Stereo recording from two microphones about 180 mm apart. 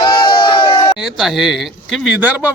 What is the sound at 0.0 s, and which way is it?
Crowd, 30° left (ahead or behind).